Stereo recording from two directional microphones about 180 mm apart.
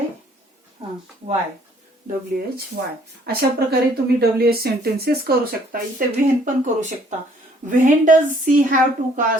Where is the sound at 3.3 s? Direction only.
60° right (ahead or behind).